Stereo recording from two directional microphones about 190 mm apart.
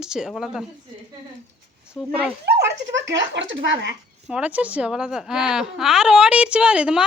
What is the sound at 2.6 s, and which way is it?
Speech, 70° right (ahead or behind).